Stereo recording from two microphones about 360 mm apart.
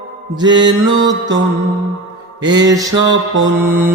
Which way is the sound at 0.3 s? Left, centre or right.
Centre.